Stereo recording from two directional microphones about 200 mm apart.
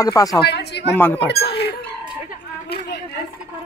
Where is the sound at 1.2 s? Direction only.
55° left (ahead or behind).